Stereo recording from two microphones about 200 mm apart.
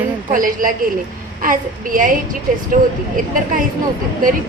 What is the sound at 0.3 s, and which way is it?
A woman's voice, 45° right (ahead or behind).